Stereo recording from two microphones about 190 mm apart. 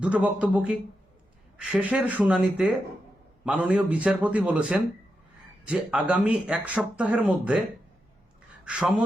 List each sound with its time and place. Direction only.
0.0 s speech: 5° right (ahead or behind)
8.6 s speech: 5° right (ahead or behind)